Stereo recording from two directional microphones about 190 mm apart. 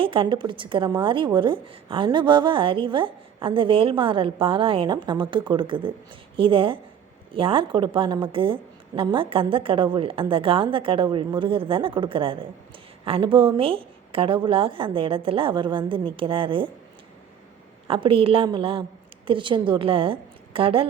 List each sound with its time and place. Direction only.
0.0 s a woman's voice: 25° right (ahead or behind)
17.8 s a woman's voice: 30° right (ahead or behind)